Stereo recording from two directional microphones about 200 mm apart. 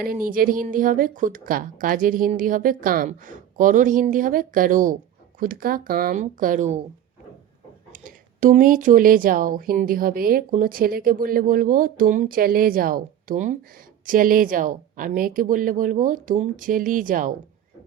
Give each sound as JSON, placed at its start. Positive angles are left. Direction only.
{"t": 0.0, "sound": "speech", "side_deg": -45}
{"t": 7.9, "sound": "speech", "side_deg": -40}